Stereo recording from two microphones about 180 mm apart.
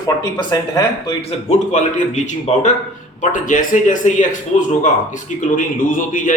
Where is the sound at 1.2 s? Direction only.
40° left (ahead or behind).